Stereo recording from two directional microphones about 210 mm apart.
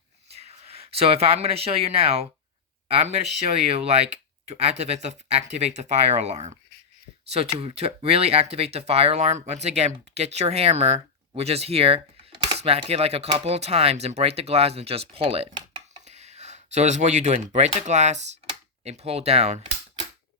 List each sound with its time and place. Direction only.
0.3 s speech: 30° right (ahead or behind)